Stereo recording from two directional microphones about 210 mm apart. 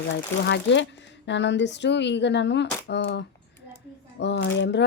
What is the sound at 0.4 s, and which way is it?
A woman's voice, 60° left (ahead or behind).